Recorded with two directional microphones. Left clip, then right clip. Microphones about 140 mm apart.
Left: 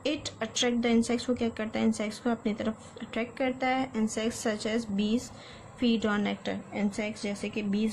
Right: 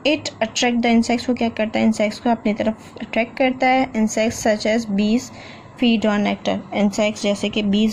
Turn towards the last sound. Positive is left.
turn(degrees=-35)  # may be behind; listen again after turning